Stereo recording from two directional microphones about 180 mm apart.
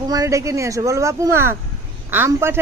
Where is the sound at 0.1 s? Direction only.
20° right (ahead or behind).